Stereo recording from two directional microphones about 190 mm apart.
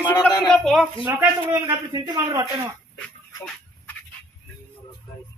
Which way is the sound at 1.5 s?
20° right (ahead or behind).